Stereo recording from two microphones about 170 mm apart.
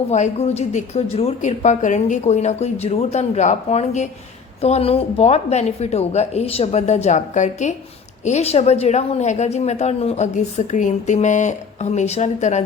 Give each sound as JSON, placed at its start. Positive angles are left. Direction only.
{"t": 0.1, "sound": "a woman's voice", "side_deg": 40}